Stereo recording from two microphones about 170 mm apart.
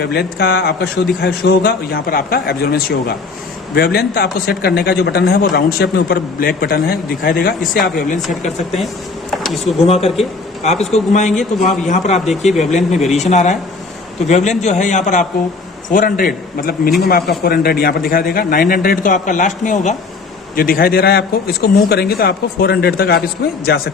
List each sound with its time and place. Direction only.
0.0 s a man's voice: 70° left (ahead or behind)
8.4 s speech: centre (ahead or behind)
9.3 s a sound: centre (ahead or behind)
9.8 s a man's voice: 35° left (ahead or behind)
20.6 s a man's voice: 60° left (ahead or behind)